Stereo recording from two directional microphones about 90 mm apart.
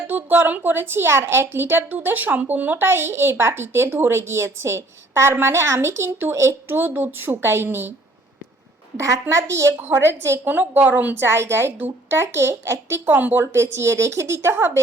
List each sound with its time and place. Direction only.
0.1 s a woman's voice: 20° right (ahead or behind)
9.0 s a woman's voice: 35° right (ahead or behind)
13.1 s a woman's voice: 20° right (ahead or behind)
13.4 s speech: 30° right (ahead or behind)